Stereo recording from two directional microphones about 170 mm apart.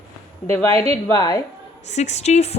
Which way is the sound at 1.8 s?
40° left (ahead or behind).